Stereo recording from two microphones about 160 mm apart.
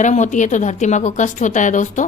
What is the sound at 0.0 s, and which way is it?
Speech, 50° left (ahead or behind).